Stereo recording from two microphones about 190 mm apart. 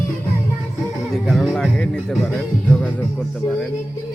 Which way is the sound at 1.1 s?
Centre (ahead or behind).